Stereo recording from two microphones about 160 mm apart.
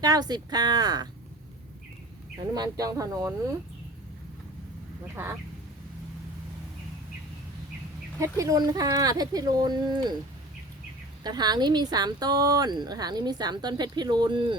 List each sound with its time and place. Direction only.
0.0 s speech: 25° right (ahead or behind)
2.6 s speech: 20° right (ahead or behind)
5.1 s speech: 15° right (ahead or behind)
8.2 s speech: 20° right (ahead or behind)
11.2 s speech: 25° right (ahead or behind)